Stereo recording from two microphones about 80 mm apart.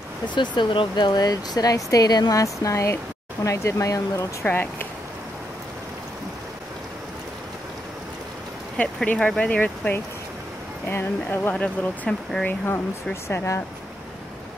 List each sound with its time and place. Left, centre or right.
0.3 s speech: left
4.5 s speech: left
9.0 s speech: centre
12.4 s speech: left